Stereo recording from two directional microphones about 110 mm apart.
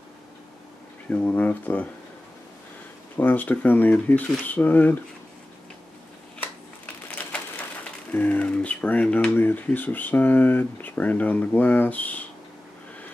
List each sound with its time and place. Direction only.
1.1 s speech: 15° left (ahead or behind)
3.2 s speech: 15° left (ahead or behind)
7.1 s a sound: 15° left (ahead or behind)
8.1 s speech: 15° left (ahead or behind)